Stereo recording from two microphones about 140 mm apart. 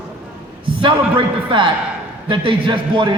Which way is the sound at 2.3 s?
35° right (ahead or behind).